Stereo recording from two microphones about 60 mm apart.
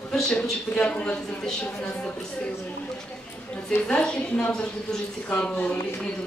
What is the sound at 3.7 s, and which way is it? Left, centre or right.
A woman's voice, centre.